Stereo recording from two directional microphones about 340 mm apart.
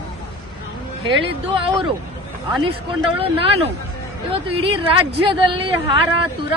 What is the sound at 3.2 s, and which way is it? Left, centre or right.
Speech, centre.